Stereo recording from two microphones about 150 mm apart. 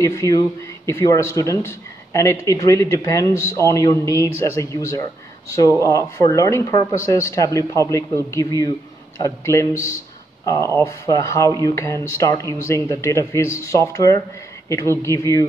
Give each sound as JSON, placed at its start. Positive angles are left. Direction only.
{"t": 0.0, "sound": "speech", "side_deg": 20}